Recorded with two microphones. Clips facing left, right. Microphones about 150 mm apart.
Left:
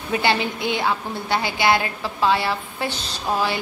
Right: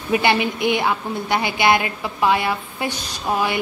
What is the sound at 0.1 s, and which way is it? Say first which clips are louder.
A woman's voice: right 3 dB; 15° right (ahead or behind).